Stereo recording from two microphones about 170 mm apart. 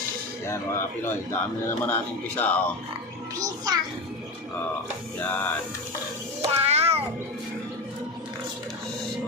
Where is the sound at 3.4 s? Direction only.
20° right (ahead or behind).